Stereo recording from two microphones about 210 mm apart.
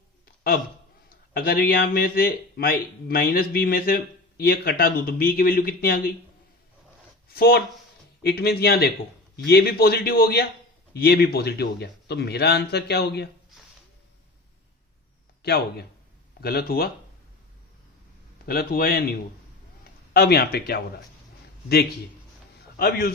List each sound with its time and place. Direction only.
1.3 s speech: 45° left (ahead or behind)
7.3 s speech: 45° left (ahead or behind)
15.4 s speech: 50° left (ahead or behind)
18.4 s speech: 45° left (ahead or behind)
20.1 s speech: 50° left (ahead or behind)
22.8 s speech: 45° left (ahead or behind)